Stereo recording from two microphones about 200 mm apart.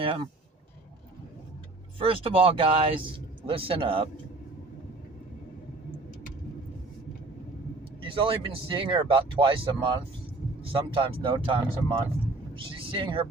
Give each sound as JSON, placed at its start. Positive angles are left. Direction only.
{"t": 2.0, "sound": "speech", "side_deg": -30}
{"t": 8.0, "sound": "speech", "side_deg": -25}